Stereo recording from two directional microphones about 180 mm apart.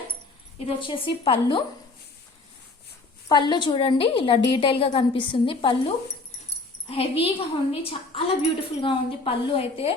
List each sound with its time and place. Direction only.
0.7 s a woman's voice: 30° left (ahead or behind)
3.2 s a woman's voice: 25° left (ahead or behind)
6.8 s a woman's voice: 30° left (ahead or behind)